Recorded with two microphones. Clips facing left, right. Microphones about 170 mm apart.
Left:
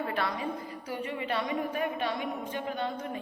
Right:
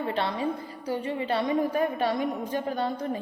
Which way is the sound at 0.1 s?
30° right (ahead or behind).